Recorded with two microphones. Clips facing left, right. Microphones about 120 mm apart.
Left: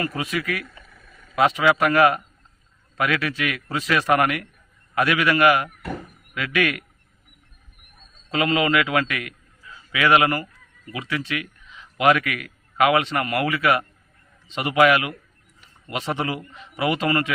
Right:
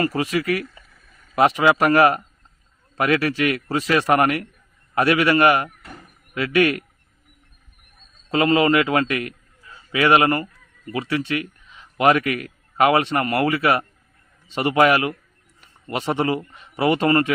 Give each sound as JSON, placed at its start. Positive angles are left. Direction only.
{"t": 0.0, "sound": "a man's voice", "side_deg": -30}
{"t": 8.3, "sound": "a man's voice", "side_deg": -30}